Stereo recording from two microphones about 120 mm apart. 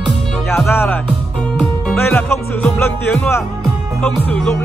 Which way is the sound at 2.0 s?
20° left (ahead or behind).